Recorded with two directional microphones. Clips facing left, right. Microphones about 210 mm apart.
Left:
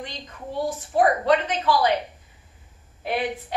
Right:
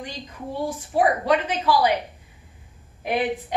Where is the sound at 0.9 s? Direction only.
10° right (ahead or behind).